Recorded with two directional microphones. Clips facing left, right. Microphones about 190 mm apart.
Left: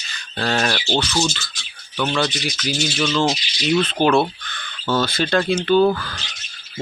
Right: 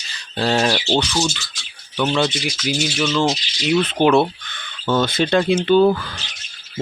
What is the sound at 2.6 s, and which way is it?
Speech, 10° right (ahead or behind).